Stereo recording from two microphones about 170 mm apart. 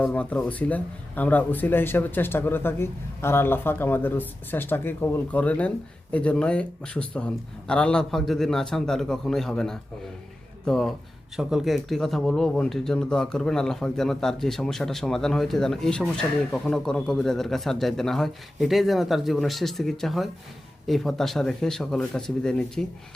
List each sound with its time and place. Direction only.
0.0 s speech: 10° left (ahead or behind)